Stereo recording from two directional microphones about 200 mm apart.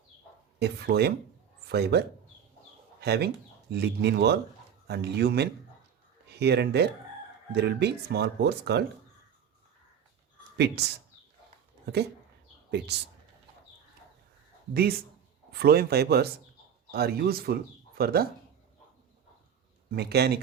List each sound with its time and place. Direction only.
0.6 s a man's voice: 55° right (ahead or behind)
14.7 s speech: 50° right (ahead or behind)
19.9 s speech: 55° right (ahead or behind)